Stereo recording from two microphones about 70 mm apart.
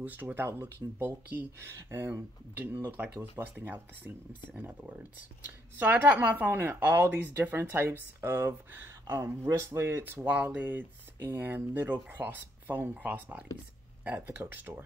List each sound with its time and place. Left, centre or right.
0.0 s speech: right
2.5 s speech: right
9.7 s speech: right
10.2 s speech: right